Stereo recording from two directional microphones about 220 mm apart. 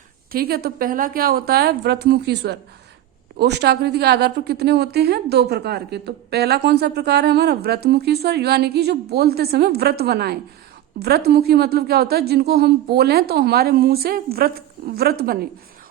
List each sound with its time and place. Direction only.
0.3 s a woman's voice: 45° right (ahead or behind)